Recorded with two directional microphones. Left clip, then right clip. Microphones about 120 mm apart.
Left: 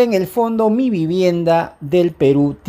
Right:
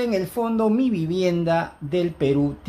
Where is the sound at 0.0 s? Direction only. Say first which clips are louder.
Left 9 dB; 55° left (ahead or behind).